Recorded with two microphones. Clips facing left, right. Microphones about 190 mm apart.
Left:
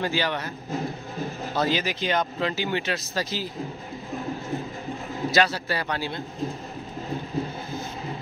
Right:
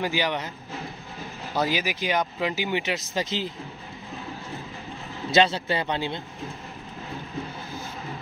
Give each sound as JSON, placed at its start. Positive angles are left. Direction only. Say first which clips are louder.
{"t": 0.0, "sound": "speech", "louder": "even", "side_deg": -15}
{"t": 1.5, "sound": "speech", "louder": "even", "side_deg": -10}
{"t": 5.3, "sound": "speech", "louder": "right 3 dB", "side_deg": -25}